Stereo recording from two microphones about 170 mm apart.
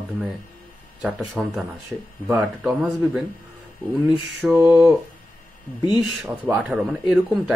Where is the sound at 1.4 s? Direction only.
5° right (ahead or behind).